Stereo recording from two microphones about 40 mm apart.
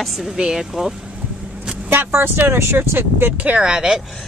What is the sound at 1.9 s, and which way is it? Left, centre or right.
Speech, right.